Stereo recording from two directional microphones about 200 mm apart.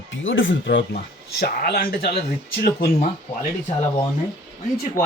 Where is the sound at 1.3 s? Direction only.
55° left (ahead or behind).